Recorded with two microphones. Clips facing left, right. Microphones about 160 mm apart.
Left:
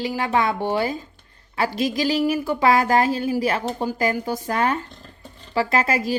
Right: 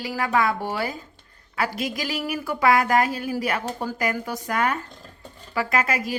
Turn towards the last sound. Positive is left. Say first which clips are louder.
# left 3 dB
turn(degrees=30)  # may be behind; listen again after turning